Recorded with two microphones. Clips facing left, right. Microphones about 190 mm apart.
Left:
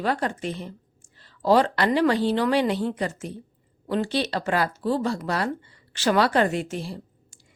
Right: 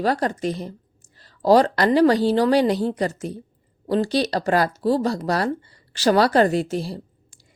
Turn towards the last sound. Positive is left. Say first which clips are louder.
# right 5 dB
turn(degrees=-35)  # may be behind; listen again after turning